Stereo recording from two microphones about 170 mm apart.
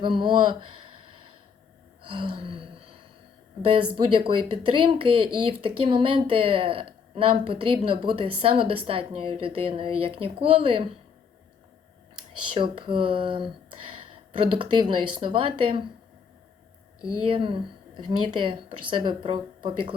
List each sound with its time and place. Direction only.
0.0 s speech: 30° right (ahead or behind)
2.0 s gasp: 30° right (ahead or behind)
3.6 s speech: 30° right (ahead or behind)
12.5 s speech: 30° right (ahead or behind)
17.0 s speech: 30° right (ahead or behind)